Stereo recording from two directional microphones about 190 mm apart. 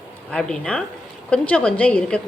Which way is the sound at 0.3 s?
5° left (ahead or behind).